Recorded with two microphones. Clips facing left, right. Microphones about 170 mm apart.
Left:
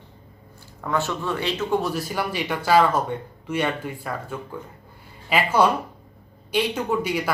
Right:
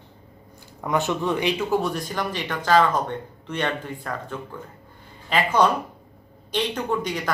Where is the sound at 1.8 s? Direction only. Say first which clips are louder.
Left 1 dB; 5° left (ahead or behind).